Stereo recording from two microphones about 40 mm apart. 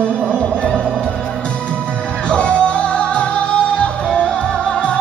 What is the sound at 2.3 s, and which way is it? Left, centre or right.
Music, left.